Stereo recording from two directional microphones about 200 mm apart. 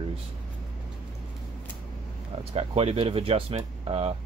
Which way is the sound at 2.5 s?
30° right (ahead or behind).